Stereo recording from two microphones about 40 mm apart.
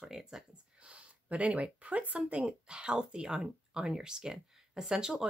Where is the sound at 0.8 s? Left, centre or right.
Right.